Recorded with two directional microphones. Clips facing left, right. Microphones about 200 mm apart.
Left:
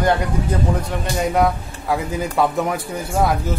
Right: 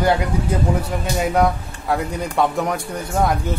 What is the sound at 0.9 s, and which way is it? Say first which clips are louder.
A man's voice: even; 5° right (ahead or behind).